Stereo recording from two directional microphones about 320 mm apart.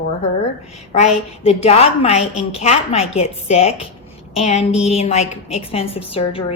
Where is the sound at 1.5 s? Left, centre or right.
Centre.